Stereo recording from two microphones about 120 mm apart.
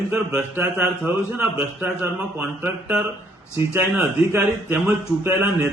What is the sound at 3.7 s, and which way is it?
A man's voice, 20° right (ahead or behind).